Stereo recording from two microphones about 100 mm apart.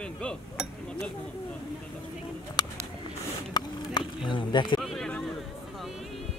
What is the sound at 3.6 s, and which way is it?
Speech, 40° left (ahead or behind).